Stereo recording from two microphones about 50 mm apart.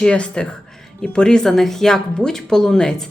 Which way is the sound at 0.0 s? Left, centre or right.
Left.